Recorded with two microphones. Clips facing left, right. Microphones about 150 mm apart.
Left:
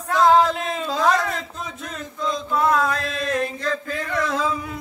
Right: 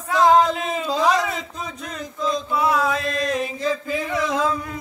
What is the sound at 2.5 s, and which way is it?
Mantra, 5° right (ahead or behind).